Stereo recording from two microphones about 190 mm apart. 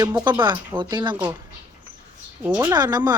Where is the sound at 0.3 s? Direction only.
25° right (ahead or behind).